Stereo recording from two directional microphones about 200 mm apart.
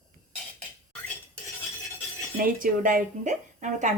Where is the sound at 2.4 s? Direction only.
45° right (ahead or behind).